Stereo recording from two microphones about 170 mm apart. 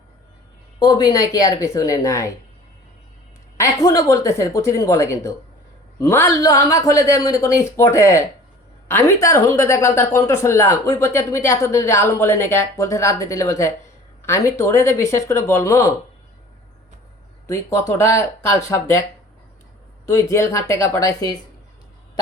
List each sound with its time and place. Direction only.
0.8 s speech: 25° left (ahead or behind)
3.6 s speech: 20° left (ahead or behind)
17.4 s speech: 15° left (ahead or behind)
20.1 s speech: 15° left (ahead or behind)